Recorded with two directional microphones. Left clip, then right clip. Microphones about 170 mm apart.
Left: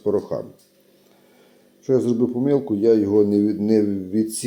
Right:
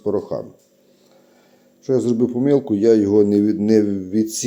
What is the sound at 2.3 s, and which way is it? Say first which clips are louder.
A man's voice: right 3 dB; 20° right (ahead or behind).